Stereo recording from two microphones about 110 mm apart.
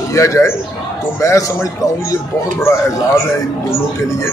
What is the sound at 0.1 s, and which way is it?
A man's voice, 30° left (ahead or behind).